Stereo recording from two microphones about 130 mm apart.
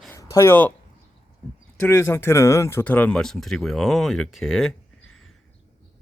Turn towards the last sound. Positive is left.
turn(degrees=0)  # may be behind; listen again after turning